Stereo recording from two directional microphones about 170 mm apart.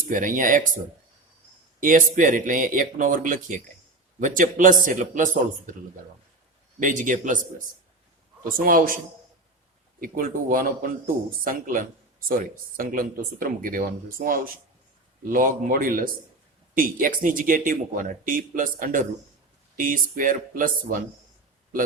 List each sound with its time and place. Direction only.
0.1 s speech: 50° right (ahead or behind)
1.8 s speech: 50° right (ahead or behind)
6.7 s speech: 50° right (ahead or behind)
10.0 s speech: 55° right (ahead or behind)